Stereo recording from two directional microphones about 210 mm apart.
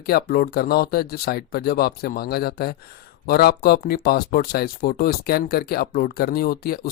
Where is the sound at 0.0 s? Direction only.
45° left (ahead or behind).